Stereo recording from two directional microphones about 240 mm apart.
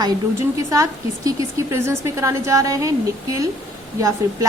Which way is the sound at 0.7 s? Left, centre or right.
Centre.